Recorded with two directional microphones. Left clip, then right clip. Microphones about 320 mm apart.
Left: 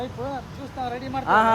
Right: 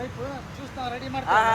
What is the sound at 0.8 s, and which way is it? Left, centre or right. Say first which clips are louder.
Speech: left 2 dB; left.